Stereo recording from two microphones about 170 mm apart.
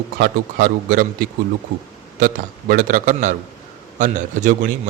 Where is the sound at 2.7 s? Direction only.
50° right (ahead or behind).